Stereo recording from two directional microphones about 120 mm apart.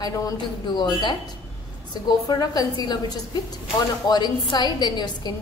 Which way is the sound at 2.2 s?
30° left (ahead or behind).